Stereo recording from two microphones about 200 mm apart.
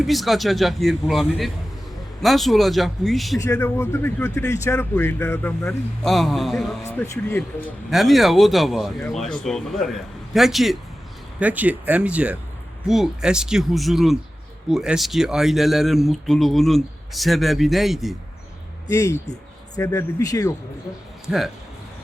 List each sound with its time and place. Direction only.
0.0 s speech: centre (ahead or behind)
3.3 s speech: 15° left (ahead or behind); by 18.2 s centre (ahead or behind)
18.9 s speech: 15° left (ahead or behind)
21.2 s speech: centre (ahead or behind)